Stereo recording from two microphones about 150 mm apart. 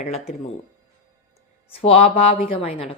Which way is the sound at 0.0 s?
45° left (ahead or behind).